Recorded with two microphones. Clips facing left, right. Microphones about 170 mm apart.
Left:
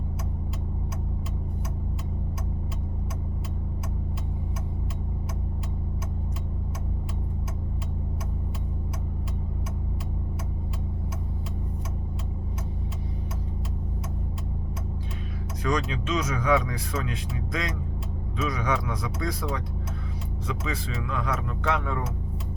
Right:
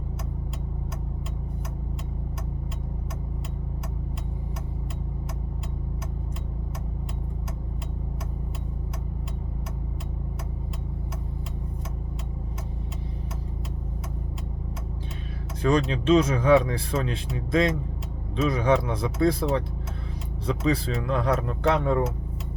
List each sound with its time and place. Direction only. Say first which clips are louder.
15.6 s speech: right 6 dB; 30° right (ahead or behind)